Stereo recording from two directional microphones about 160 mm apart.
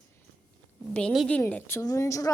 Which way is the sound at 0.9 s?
5° left (ahead or behind).